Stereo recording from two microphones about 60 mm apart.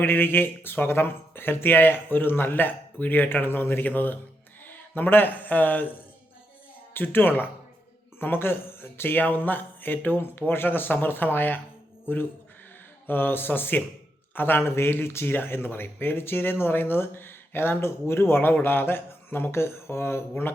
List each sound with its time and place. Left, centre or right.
0.0 s speech: left
6.9 s speech: left